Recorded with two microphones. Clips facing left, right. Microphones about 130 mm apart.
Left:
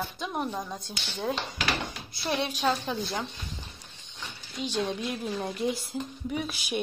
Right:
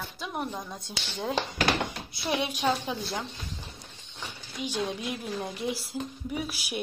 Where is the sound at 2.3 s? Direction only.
10° right (ahead or behind).